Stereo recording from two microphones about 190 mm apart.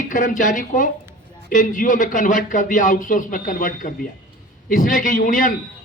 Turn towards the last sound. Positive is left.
turn(degrees=45)  # may be behind; listen again after turning